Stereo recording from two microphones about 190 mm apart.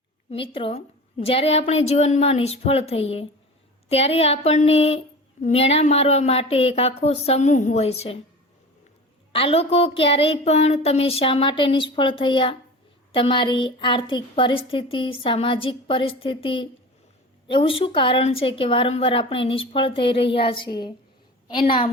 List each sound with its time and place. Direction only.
0.3 s a woman's voice: 30° left (ahead or behind)
9.3 s a woman's voice: 30° left (ahead or behind)